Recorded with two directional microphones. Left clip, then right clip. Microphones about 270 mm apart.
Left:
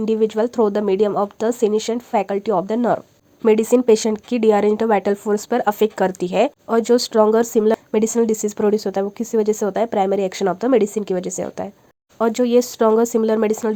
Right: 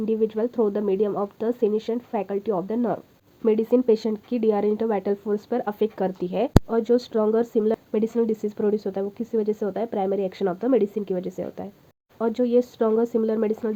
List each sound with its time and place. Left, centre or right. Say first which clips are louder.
0.0 s speech: left 5 dB; centre